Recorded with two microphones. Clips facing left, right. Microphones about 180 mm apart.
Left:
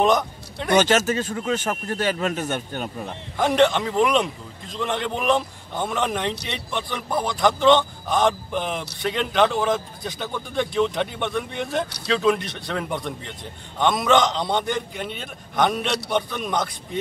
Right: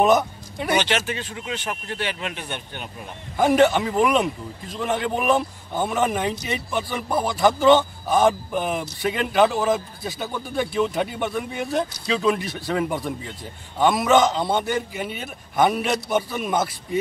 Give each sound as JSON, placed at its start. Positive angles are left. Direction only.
{"t": 0.0, "sound": "speech", "side_deg": -5}
{"t": 0.7, "sound": "speech", "side_deg": 45}
{"t": 3.3, "sound": "a man's voice", "side_deg": -5}